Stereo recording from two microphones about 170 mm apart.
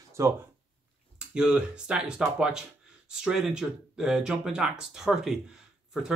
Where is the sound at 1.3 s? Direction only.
5° right (ahead or behind).